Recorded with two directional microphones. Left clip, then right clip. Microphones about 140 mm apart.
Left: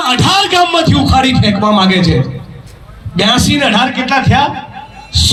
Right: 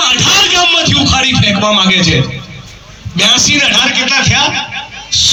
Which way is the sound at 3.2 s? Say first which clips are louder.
Right 2 dB; 50° left (ahead or behind).